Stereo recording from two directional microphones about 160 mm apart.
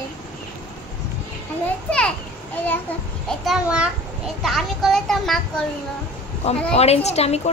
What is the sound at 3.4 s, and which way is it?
A child's voice, 5° right (ahead or behind).